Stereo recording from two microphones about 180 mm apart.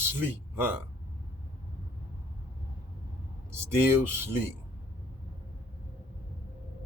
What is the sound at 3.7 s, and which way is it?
Speech, 10° right (ahead or behind).